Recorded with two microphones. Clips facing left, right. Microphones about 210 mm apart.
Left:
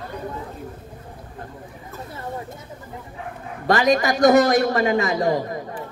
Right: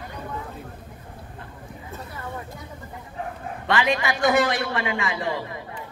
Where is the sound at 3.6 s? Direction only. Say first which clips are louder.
Left 5 dB; 40° left (ahead or behind).